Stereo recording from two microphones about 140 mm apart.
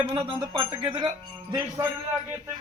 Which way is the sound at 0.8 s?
35° right (ahead or behind).